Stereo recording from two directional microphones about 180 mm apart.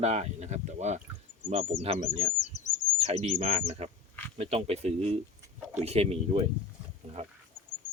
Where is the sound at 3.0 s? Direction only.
35° right (ahead or behind).